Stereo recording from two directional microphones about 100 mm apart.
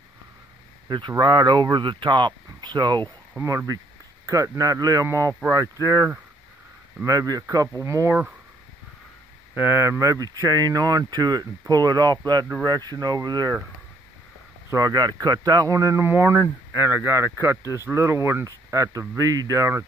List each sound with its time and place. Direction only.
0.8 s speech: 50° right (ahead or behind)
3.4 s speech: 35° right (ahead or behind)
7.1 s speech: 40° right (ahead or behind)
9.6 s speech: 25° right (ahead or behind); by 13.6 s 40° right (ahead or behind)
14.7 s speech: 40° right (ahead or behind)